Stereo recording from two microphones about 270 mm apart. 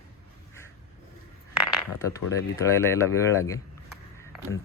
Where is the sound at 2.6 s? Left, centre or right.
Centre.